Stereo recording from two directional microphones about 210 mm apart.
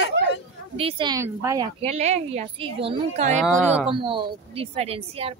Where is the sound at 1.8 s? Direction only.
30° right (ahead or behind).